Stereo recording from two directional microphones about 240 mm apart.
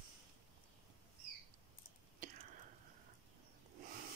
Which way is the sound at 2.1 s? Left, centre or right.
Right.